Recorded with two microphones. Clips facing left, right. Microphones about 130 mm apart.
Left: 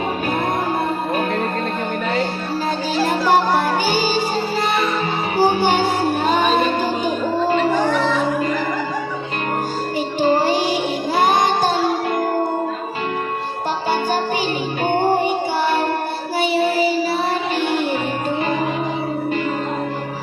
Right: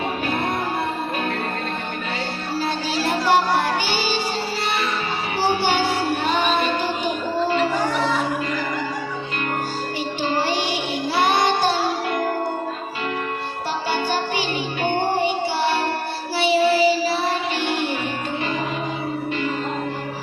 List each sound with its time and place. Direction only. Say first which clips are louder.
2.9 s music: left 3 dB; 45° left (ahead or behind)
5.4 s music: left 4 dB; 45° left (ahead or behind)
10.2 s music: left 7 dB; 40° left (ahead or behind)
11.2 s child singing: left 2 dB; 45° left (ahead or behind)
14.8 s music: left 4 dB; 40° left (ahead or behind)
16.4 s child singing: right 1 dB; 45° left (ahead or behind)
17.6 s music: left 4 dB; 40° left (ahead or behind)